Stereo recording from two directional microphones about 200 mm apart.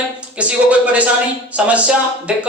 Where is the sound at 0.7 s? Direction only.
5° right (ahead or behind).